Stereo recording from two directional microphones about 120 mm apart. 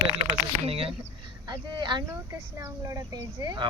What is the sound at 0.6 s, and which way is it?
Speech, 55° right (ahead or behind).